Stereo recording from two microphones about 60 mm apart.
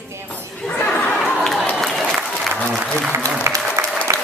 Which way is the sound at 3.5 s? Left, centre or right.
Right.